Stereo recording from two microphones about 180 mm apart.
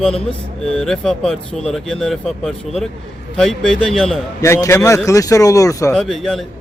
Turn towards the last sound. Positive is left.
turn(degrees=0)  # may be behind; listen again after turning